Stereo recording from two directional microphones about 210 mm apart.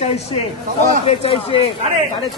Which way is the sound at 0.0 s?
30° left (ahead or behind).